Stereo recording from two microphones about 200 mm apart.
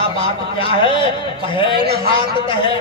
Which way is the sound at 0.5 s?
25° left (ahead or behind).